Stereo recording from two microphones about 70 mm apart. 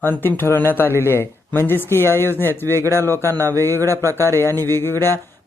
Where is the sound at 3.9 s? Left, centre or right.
Right.